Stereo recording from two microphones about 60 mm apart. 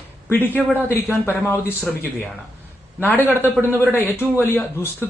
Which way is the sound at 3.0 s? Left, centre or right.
Left.